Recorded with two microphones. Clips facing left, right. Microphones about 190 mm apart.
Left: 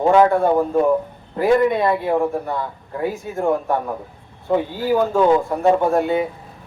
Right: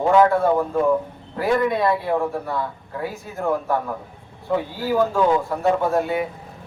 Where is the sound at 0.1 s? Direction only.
20° left (ahead or behind).